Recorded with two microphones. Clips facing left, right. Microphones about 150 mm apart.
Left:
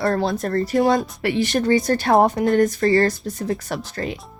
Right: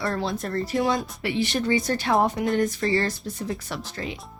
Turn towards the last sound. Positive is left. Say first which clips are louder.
# left 6 dB
turn(degrees=50)  # may be behind; listen again after turning